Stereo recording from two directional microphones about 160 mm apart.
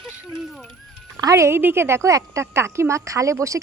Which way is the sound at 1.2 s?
20° right (ahead or behind).